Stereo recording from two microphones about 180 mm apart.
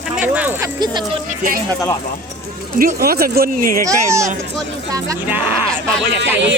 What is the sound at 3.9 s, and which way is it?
Speech, 15° right (ahead or behind).